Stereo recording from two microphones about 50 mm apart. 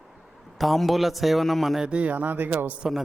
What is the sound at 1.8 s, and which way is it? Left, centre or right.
Speech, right.